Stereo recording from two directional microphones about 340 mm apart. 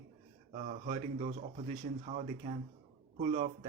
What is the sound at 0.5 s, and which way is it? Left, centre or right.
Speech, centre.